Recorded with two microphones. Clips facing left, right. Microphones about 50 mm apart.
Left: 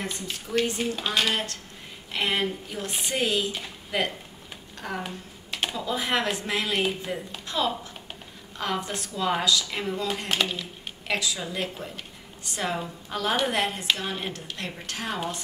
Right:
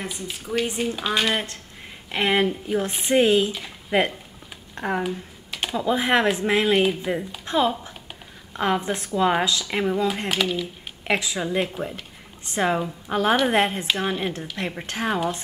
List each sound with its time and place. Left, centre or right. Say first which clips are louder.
0.0 s speech: right 1 dB; centre
1.3 s speech: right 3 dB; right
5.0 s computer keyboard: right 8 dB; centre
5.8 s speech: right 8 dB; right
6.7 s speech: right 7 dB; centre
7.4 s speech: right 5 dB; right
10.2 s speech: right 4 dB; centre
11.1 s a woman's voice: right 5 dB; right